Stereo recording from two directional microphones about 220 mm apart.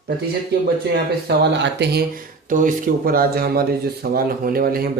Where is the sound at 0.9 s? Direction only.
50° right (ahead or behind).